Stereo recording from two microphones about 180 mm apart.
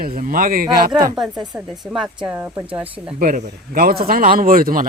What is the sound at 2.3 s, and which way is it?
Speech, 10° right (ahead or behind).